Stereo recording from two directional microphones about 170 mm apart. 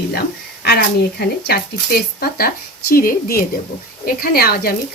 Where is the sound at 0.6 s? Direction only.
70° left (ahead or behind).